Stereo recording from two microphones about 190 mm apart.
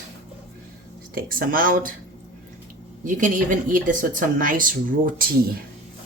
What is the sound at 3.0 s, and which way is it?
Speech, 45° right (ahead or behind).